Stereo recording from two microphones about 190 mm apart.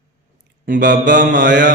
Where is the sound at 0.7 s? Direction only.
45° right (ahead or behind).